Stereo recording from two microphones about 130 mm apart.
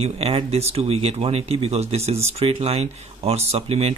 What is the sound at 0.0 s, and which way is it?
Speech, 50° right (ahead or behind).